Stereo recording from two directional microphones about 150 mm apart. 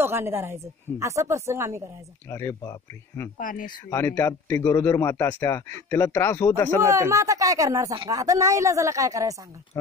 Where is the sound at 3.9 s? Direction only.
15° left (ahead or behind).